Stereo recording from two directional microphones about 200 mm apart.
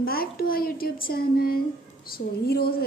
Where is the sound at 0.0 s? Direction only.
50° left (ahead or behind).